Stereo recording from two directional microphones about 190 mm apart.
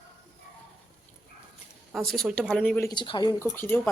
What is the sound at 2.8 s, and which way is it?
Speech, 25° left (ahead or behind).